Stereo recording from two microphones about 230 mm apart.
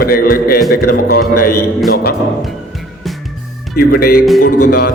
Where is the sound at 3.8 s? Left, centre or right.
Left.